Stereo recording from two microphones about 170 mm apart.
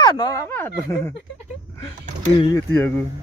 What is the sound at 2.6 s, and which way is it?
Speech, 10° left (ahead or behind).